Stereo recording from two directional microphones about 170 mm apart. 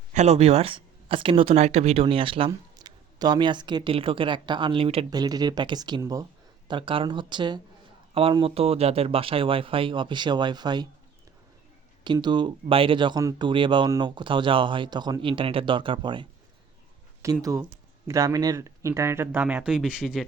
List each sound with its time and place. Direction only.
0.1 s speech: 40° right (ahead or behind)
5.1 s speech: 25° right (ahead or behind)
12.0 s speech: 25° right (ahead or behind)
17.2 s speech: 20° right (ahead or behind)